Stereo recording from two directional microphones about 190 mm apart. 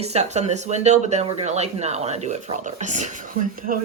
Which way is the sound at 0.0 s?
35° right (ahead or behind).